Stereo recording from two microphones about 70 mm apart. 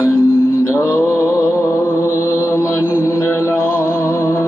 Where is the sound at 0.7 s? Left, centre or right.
Left.